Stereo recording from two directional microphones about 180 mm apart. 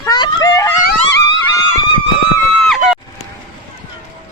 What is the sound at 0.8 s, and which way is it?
Wail, 60° left (ahead or behind).